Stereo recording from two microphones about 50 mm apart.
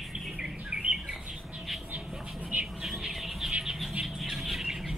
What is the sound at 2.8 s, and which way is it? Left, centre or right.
Bird, centre.